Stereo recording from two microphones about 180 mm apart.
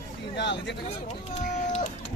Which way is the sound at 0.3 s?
75° left (ahead or behind).